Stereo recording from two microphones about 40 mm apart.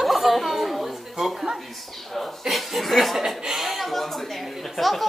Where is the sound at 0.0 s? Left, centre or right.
Centre.